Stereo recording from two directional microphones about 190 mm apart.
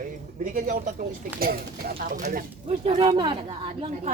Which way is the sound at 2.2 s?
35° right (ahead or behind).